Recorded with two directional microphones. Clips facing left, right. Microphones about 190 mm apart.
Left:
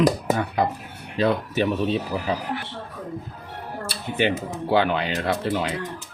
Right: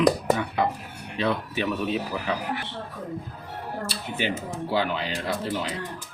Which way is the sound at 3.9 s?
60° left (ahead or behind).